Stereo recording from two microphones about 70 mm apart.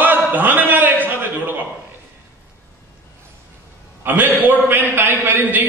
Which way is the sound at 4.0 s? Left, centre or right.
Right.